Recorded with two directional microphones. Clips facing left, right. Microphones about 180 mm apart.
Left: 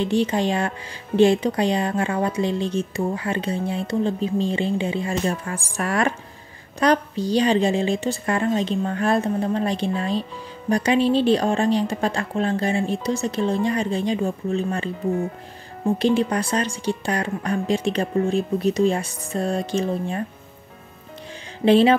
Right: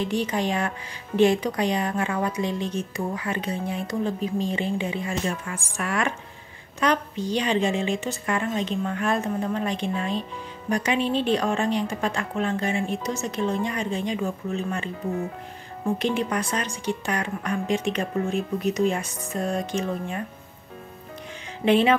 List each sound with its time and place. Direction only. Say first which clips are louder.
0.0 s speech: left 4 dB; 30° left (ahead or behind)
21.6 s speech: left 4 dB; 35° left (ahead or behind)